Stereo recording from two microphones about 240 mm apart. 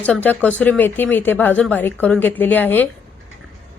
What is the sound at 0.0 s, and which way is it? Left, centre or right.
A woman's voice, centre.